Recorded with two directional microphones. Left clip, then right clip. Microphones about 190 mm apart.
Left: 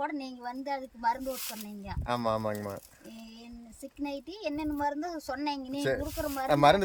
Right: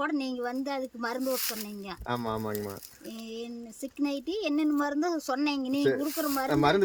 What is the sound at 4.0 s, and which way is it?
Speech, 15° right (ahead or behind).